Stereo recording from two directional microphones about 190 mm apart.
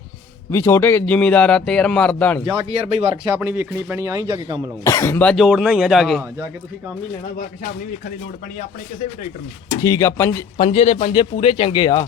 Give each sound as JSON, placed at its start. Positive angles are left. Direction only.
{"t": 0.5, "sound": "a man's voice", "side_deg": 10}
{"t": 2.6, "sound": "speech", "side_deg": -30}
{"t": 3.4, "sound": "a man's voice", "side_deg": -10}
{"t": 4.8, "sound": "speech", "side_deg": 15}
{"t": 9.8, "sound": "a man's voice", "side_deg": 15}
{"t": 10.6, "sound": "speech", "side_deg": 30}